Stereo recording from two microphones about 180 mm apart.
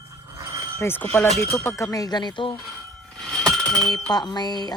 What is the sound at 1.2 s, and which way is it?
Speech, 35° right (ahead or behind).